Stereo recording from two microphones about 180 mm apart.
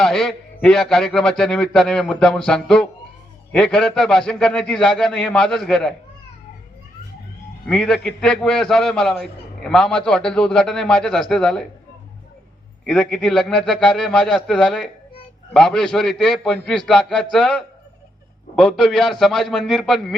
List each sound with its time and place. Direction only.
0.0 s a man's voice: centre (ahead or behind)
7.7 s a man's voice: 5° left (ahead or behind)
12.8 s a man's voice: 5° left (ahead or behind)